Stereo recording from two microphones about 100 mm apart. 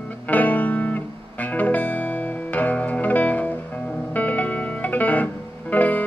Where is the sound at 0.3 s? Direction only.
15° left (ahead or behind).